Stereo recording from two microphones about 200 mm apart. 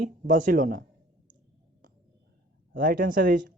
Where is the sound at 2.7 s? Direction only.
45° right (ahead or behind).